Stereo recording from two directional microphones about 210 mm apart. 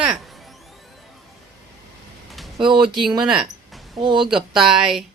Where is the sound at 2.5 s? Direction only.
25° right (ahead or behind).